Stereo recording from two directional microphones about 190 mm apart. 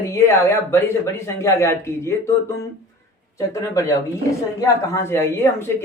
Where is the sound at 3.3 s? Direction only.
15° left (ahead or behind).